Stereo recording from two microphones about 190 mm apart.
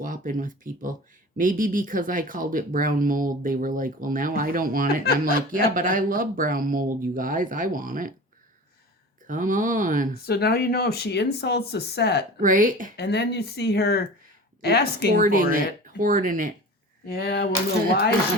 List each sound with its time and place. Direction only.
0.0 s speech: 45° right (ahead or behind)
9.2 s speech: 45° right (ahead or behind)
10.2 s speech: 55° left (ahead or behind)
12.4 s speech: 45° right (ahead or behind)
13.0 s speech: 60° left (ahead or behind)
15.1 s speech: 45° right (ahead or behind)
17.2 s speech: 60° left (ahead or behind)